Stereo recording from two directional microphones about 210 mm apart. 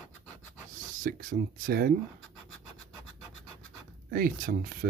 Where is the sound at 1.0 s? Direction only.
40° right (ahead or behind).